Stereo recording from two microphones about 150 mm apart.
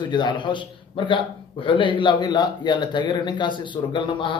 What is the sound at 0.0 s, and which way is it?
A man's voice, 30° left (ahead or behind).